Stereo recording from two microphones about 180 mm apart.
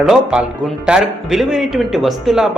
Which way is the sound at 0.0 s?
5° right (ahead or behind).